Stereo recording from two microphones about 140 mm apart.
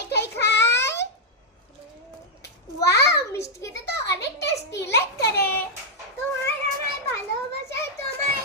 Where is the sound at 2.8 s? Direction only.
20° left (ahead or behind).